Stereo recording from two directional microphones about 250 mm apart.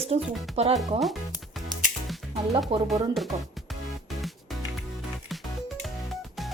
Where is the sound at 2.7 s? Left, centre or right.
Right.